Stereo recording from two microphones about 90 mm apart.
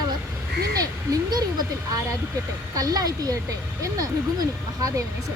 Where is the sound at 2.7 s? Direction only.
40° right (ahead or behind).